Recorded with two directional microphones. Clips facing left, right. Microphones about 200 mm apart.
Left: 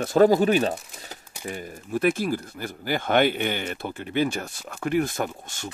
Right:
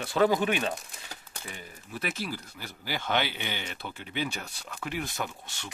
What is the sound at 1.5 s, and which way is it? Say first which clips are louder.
Speech: left 13 dB; 50° left (ahead or behind).